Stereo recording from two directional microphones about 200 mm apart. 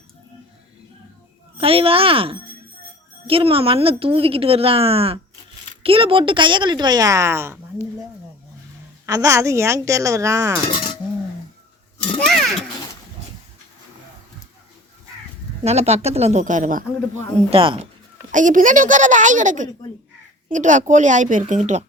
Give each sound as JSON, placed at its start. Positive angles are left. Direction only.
{"t": 1.5, "sound": "a woman's voice", "side_deg": -30}
{"t": 9.0, "sound": "speech", "side_deg": -15}
{"t": 10.7, "sound": "chink", "side_deg": 25}
{"t": 12.2, "sound": "grunt", "side_deg": 0}
{"t": 15.6, "sound": "a child's voice", "side_deg": -30}
{"t": 17.5, "sound": "a woman's voice", "side_deg": -30}
{"t": 18.3, "sound": "a child's voice", "side_deg": -40}